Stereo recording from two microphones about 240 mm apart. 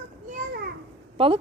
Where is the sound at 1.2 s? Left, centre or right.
Right.